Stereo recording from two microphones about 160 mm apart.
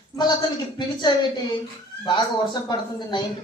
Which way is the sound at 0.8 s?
30° left (ahead or behind).